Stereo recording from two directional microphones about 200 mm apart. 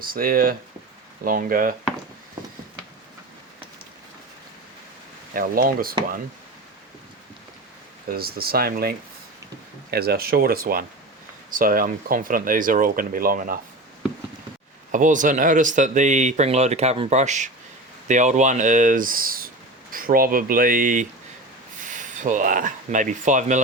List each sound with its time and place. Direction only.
0.0 s speech: 45° right (ahead or behind)
5.3 s speech: 45° right (ahead or behind)
8.0 s speech: 50° right (ahead or behind)
14.9 s speech: 40° right (ahead or behind)